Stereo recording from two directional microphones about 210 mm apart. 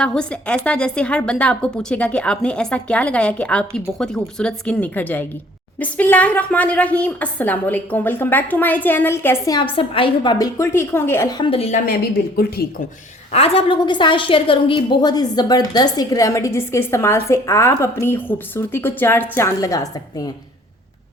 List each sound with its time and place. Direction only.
0.0 s a woman's voice: 5° left (ahead or behind); by 11.8 s 30° left (ahead or behind)
12.6 s speech: 50° left (ahead or behind)
13.3 s a woman's voice: 30° left (ahead or behind)